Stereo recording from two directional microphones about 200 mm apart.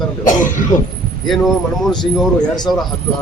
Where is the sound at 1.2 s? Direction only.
Centre (ahead or behind).